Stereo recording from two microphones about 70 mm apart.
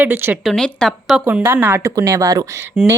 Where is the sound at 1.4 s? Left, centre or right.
Right.